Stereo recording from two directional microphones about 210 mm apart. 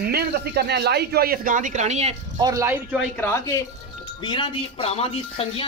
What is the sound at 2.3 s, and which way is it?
Speech, 15° right (ahead or behind).